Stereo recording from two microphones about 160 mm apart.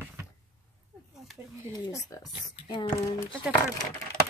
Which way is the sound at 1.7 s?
20° left (ahead or behind).